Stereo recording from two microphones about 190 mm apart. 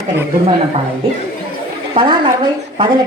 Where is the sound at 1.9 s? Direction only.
25° right (ahead or behind).